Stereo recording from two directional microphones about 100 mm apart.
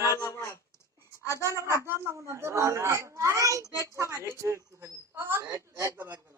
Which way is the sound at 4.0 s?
30° right (ahead or behind).